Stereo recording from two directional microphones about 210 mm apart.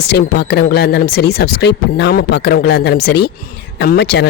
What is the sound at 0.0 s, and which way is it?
Speech, 50° left (ahead or behind).